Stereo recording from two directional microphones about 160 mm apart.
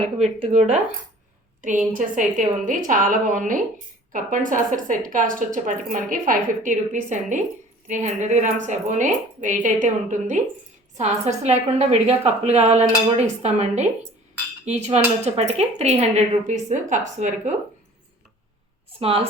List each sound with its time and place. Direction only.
0.2 s a woman's voice: 40° right (ahead or behind)
1.6 s a woman's voice: 55° right (ahead or behind)
14.6 s cutlery: 45° right (ahead or behind)
15.2 s a woman's voice: 45° right (ahead or behind)
18.9 s a woman's voice: 35° right (ahead or behind)